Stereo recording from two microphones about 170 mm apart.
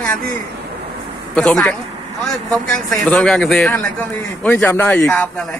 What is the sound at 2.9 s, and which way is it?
A man's voice, 10° left (ahead or behind).